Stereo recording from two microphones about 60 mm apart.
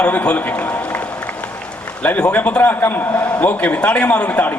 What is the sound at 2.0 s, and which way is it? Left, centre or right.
A man's voice, left.